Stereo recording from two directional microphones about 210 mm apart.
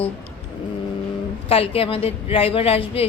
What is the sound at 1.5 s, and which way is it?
A woman's voice, 25° left (ahead or behind).